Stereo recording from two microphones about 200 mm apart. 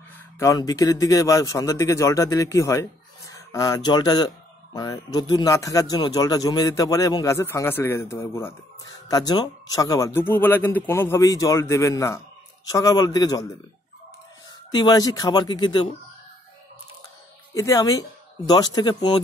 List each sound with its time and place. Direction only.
0.4 s speech: 15° left (ahead or behind)
14.7 s speech: 20° left (ahead or behind)
17.6 s speech: 15° left (ahead or behind)